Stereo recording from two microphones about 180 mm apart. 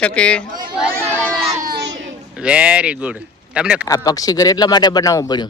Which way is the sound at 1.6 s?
70° right (ahead or behind).